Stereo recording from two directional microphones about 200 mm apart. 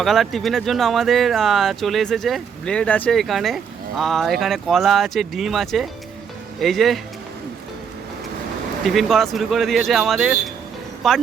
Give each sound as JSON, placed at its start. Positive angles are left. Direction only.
{"t": 0.0, "sound": "speech", "side_deg": 0}
{"t": 8.8, "sound": "speech", "side_deg": 0}